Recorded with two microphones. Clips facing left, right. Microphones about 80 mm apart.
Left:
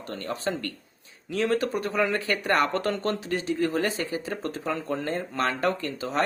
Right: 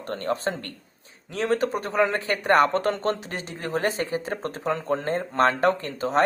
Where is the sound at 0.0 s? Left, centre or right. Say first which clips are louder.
Right 4 dB; right.